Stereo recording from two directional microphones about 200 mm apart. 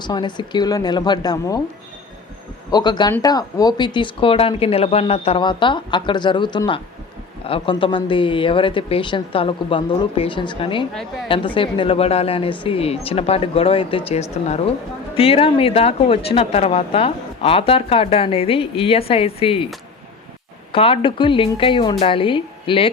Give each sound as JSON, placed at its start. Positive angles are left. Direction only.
{"t": 0.0, "sound": "speech", "side_deg": 20}
{"t": 2.6, "sound": "speech", "side_deg": 20}
{"t": 20.7, "sound": "speech", "side_deg": 25}